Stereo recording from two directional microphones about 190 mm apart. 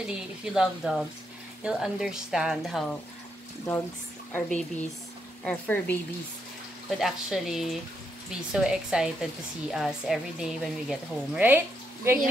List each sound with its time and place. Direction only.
0.0 s a woman's voice: 5° right (ahead or behind)
4.3 s speech: 10° left (ahead or behind)
7.0 s a woman's voice: centre (ahead or behind)